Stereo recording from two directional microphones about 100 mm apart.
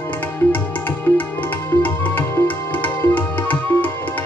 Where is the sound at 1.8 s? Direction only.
15° left (ahead or behind).